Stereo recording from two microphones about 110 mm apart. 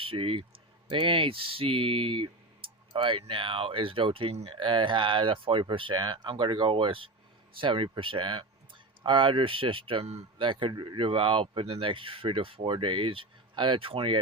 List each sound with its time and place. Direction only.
0.0 s a man's voice: 55° right (ahead or behind)